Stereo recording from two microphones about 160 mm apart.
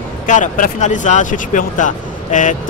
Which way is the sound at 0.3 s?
50° left (ahead or behind).